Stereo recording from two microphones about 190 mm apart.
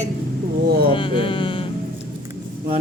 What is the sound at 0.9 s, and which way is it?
Speech, 25° left (ahead or behind).